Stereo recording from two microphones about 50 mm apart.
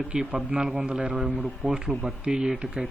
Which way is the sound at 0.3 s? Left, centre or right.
Right.